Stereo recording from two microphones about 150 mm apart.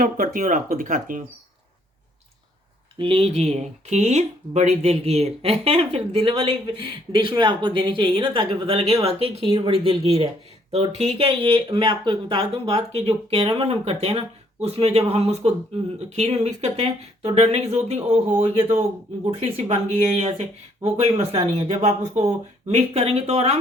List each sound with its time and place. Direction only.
0.0 s speech: 65° right (ahead or behind)
3.0 s speech: 40° right (ahead or behind)